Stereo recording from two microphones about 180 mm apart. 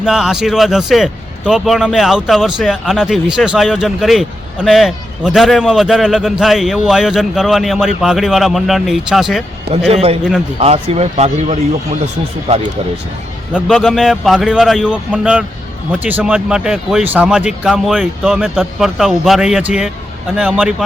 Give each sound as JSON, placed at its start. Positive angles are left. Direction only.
{"t": 0.0, "sound": "a man's voice", "side_deg": -5}
{"t": 9.9, "sound": "speech", "side_deg": -35}
{"t": 13.5, "sound": "a man's voice", "side_deg": 0}